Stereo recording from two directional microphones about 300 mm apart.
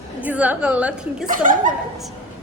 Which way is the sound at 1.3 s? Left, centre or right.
Right.